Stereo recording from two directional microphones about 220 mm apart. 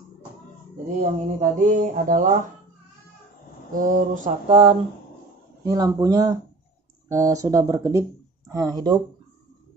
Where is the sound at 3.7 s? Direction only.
40° right (ahead or behind).